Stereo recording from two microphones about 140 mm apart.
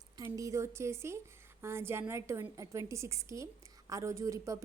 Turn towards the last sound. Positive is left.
turn(degrees=-20)  # may be behind; listen again after turning